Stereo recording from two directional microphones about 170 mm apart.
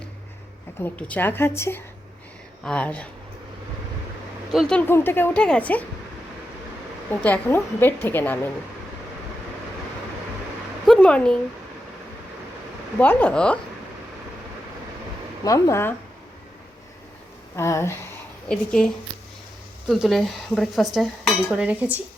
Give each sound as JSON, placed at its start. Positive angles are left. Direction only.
{"t": 0.8, "sound": "a woman's voice", "side_deg": 10}
{"t": 4.5, "sound": "a woman's voice", "side_deg": 5}
{"t": 7.3, "sound": "a woman's voice", "side_deg": 10}
{"t": 10.8, "sound": "speech", "side_deg": 5}
{"t": 13.0, "sound": "a woman's voice", "side_deg": 10}
{"t": 15.4, "sound": "a woman's voice", "side_deg": 20}
{"t": 17.6, "sound": "a woman's voice", "side_deg": 15}
{"t": 18.4, "sound": "speech", "side_deg": 5}
{"t": 19.9, "sound": "speech", "side_deg": 0}
{"t": 20.9, "sound": "dishes", "side_deg": 0}